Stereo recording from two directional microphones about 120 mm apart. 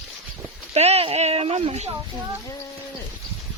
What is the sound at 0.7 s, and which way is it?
Speech, 60° right (ahead or behind).